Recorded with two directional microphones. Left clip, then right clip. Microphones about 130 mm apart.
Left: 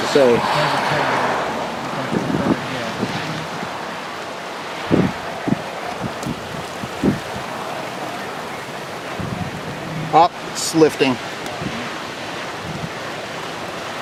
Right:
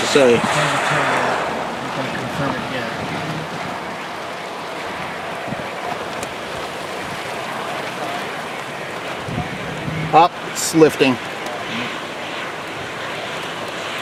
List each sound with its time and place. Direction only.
0.0 s speech: 15° right (ahead or behind)
10.1 s speech: 10° right (ahead or behind)